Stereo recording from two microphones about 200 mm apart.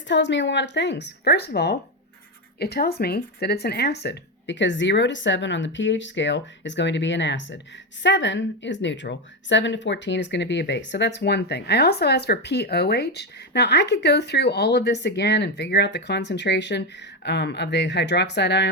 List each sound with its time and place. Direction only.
0.1 s speech: 60° left (ahead or behind)